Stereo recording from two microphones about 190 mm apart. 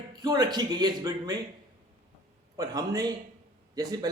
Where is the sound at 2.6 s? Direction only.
20° right (ahead or behind).